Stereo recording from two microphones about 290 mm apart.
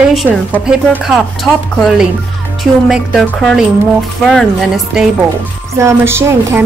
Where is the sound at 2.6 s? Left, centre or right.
Centre.